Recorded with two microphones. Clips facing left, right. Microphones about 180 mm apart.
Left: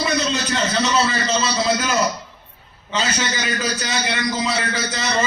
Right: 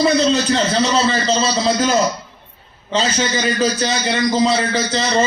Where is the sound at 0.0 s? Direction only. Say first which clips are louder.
Right 7 dB; 30° right (ahead or behind).